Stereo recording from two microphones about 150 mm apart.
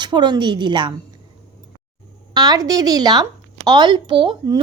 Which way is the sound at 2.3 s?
25° right (ahead or behind).